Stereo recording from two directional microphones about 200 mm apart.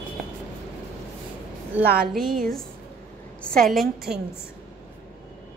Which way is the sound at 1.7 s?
10° right (ahead or behind).